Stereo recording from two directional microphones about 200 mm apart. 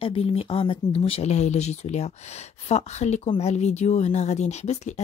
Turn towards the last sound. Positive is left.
turn(degrees=35)  # may be behind; listen again after turning